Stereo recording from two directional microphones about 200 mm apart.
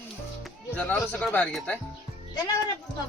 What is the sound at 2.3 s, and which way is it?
Speech, 20° left (ahead or behind).